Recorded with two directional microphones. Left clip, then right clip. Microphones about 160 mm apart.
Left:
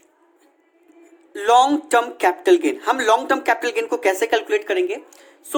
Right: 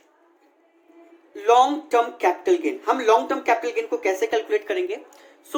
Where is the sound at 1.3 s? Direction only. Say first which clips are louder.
Left 2 dB; 75° left (ahead or behind).